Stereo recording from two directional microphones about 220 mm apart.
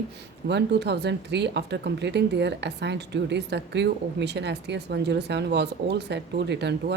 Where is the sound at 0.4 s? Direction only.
50° right (ahead or behind).